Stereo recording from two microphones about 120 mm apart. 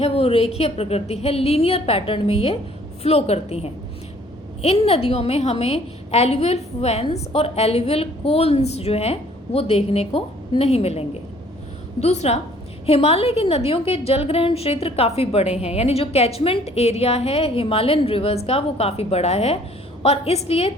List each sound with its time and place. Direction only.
0.0 s a woman's voice: 50° left (ahead or behind)